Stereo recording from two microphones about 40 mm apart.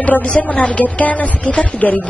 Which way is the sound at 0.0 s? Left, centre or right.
Left.